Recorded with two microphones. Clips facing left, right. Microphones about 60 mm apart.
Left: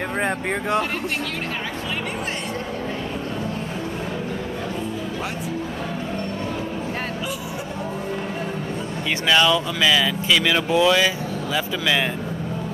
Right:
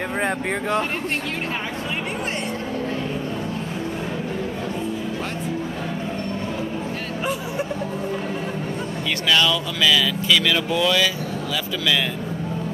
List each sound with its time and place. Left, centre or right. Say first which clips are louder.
0.2 s speech: even; centre
9.3 s speech: left 2 dB; centre